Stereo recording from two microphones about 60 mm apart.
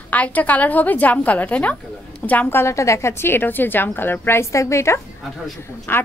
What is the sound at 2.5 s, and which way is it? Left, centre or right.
A woman's voice, left.